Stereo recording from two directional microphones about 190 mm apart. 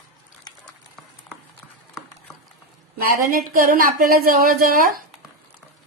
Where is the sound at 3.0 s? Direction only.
45° right (ahead or behind).